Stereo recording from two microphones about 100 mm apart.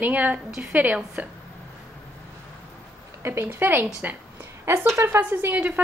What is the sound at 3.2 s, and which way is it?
A woman's voice, 25° right (ahead or behind).